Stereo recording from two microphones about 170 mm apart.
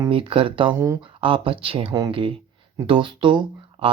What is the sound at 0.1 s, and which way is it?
Speech, 30° right (ahead or behind).